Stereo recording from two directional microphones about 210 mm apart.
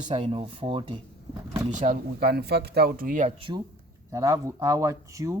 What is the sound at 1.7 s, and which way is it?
Speech, 40° right (ahead or behind).